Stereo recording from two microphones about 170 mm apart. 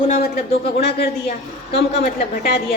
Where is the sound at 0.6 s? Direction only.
65° left (ahead or behind).